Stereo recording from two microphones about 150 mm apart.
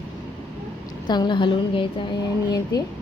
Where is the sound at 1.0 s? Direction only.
30° left (ahead or behind).